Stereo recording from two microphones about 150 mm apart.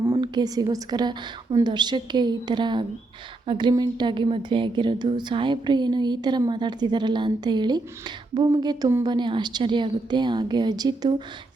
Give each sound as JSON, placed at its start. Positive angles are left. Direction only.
{"t": 0.1, "sound": "speech", "side_deg": -30}
{"t": 9.0, "sound": "speech", "side_deg": -30}